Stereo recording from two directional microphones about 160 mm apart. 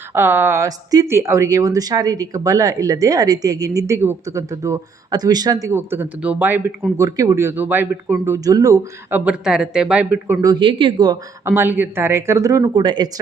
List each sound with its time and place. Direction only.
0.1 s speech: 15° right (ahead or behind)
10.4 s speech: 30° right (ahead or behind)
11.4 s speech: 15° right (ahead or behind)